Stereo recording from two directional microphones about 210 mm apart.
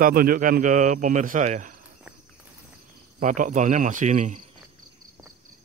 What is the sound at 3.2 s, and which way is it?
A man's voice, 35° right (ahead or behind).